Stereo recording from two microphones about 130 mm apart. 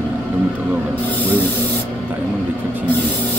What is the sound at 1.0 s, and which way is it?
Speech, 15° left (ahead or behind).